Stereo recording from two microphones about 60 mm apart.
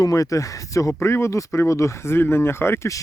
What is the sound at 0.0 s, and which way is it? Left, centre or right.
Speech, left.